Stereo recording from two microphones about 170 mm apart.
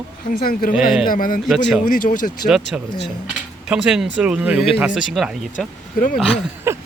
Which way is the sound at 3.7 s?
5° right (ahead or behind).